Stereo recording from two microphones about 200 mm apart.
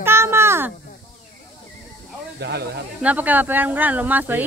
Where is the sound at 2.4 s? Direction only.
60° right (ahead or behind).